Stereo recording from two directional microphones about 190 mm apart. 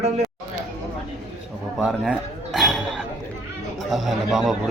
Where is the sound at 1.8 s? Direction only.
Centre (ahead or behind).